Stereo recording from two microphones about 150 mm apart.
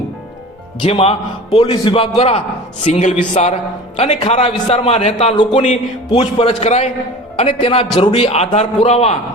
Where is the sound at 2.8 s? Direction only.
50° left (ahead or behind).